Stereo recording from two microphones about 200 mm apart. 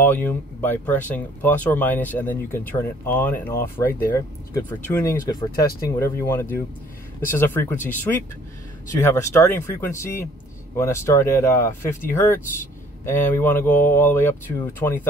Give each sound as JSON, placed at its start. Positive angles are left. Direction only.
{"t": 0.0, "sound": "speech", "side_deg": 10}